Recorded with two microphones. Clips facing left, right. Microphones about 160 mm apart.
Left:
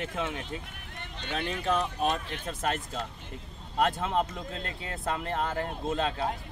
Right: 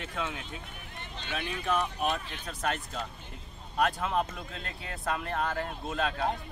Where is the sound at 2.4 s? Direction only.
25° left (ahead or behind).